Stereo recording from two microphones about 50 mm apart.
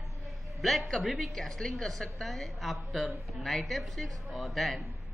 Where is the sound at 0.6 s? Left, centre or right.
Centre.